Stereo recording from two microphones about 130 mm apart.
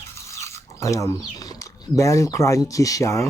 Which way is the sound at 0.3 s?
20° left (ahead or behind).